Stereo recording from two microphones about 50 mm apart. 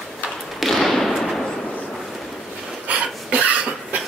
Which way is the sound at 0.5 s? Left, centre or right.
Centre.